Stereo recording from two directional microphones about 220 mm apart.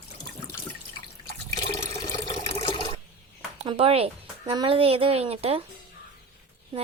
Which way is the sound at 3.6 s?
25° right (ahead or behind).